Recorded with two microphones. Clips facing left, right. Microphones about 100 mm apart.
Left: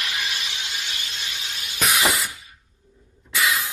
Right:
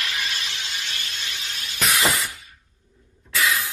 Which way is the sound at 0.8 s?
20° left (ahead or behind).